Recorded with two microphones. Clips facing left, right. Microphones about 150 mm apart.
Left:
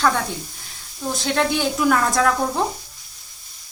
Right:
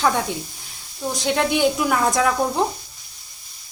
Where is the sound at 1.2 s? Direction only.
10° right (ahead or behind).